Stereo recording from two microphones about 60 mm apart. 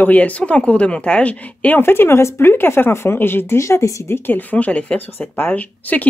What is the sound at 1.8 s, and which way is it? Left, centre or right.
Speech, left.